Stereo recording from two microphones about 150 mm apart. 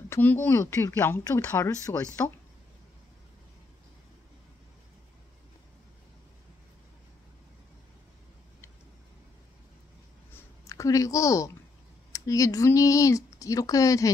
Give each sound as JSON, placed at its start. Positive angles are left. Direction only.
{"t": 0.1, "sound": "speech", "side_deg": 10}
{"t": 10.3, "sound": "a sound", "side_deg": 20}
{"t": 12.1, "sound": "speech", "side_deg": 20}